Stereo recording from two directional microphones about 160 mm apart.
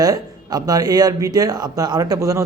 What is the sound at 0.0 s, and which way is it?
A man's voice, 20° right (ahead or behind).